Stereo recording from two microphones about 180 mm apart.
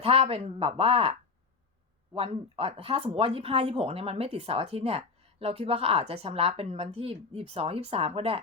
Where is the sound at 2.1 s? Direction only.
35° right (ahead or behind).